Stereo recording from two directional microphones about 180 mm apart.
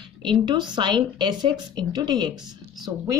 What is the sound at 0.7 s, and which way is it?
Speech, 25° right (ahead or behind).